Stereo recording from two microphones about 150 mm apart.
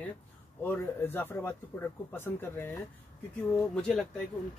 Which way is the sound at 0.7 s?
15° left (ahead or behind).